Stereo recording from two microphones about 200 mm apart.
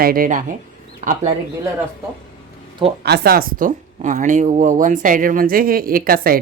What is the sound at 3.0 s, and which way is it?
Speech, 50° right (ahead or behind).